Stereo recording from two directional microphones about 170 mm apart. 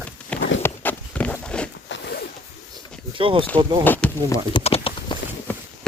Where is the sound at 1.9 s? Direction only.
75° left (ahead or behind).